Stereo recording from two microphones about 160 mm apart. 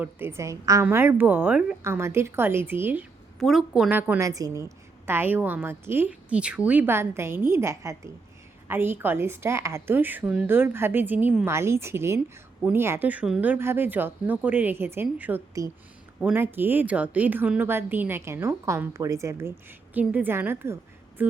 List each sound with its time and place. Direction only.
0.0 s a woman's voice: 15° right (ahead or behind)
4.2 s a woman's voice: 20° right (ahead or behind)